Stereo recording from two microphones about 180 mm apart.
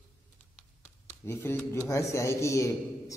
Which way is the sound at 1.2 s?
15° left (ahead or behind).